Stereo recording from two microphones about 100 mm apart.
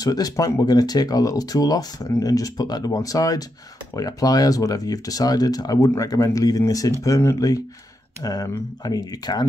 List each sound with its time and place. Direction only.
0.0 s speech: 40° left (ahead or behind)